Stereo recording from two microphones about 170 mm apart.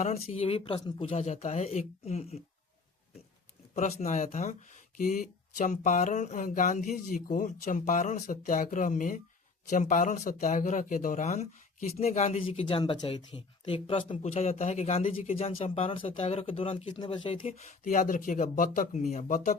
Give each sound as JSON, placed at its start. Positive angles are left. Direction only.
{"t": 0.0, "sound": "speech", "side_deg": 40}
{"t": 3.8, "sound": "speech", "side_deg": 40}